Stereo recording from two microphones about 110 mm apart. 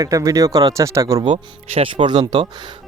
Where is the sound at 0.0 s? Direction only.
30° right (ahead or behind).